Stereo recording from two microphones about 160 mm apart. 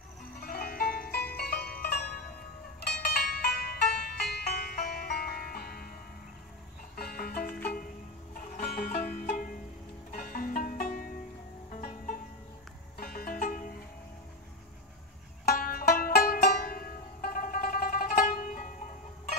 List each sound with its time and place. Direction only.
0.4 s music: 65° left (ahead or behind)
7.0 s music: 65° left (ahead or behind)
12.9 s music: 65° left (ahead or behind)
15.4 s music: 65° left (ahead or behind)